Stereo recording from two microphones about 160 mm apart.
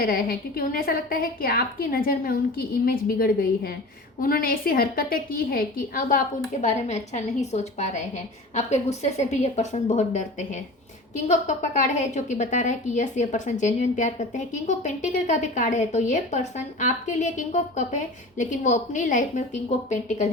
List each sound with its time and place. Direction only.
0.0 s a woman's voice: 65° left (ahead or behind); by 20.3 s 50° left (ahead or behind)